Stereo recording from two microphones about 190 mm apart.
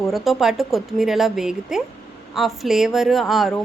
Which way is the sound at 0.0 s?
Centre (ahead or behind).